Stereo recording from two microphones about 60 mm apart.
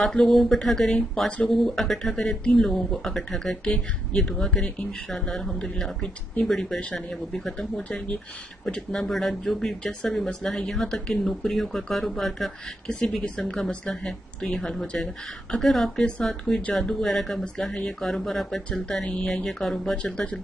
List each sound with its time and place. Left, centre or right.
0.0 s speech: centre